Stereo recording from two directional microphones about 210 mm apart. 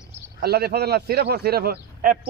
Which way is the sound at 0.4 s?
50° right (ahead or behind).